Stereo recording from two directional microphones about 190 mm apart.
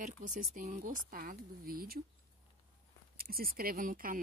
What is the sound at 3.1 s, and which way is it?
Speech, 50° right (ahead or behind).